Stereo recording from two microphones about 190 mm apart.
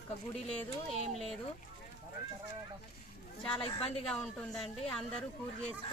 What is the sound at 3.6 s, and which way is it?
Speech, 30° left (ahead or behind).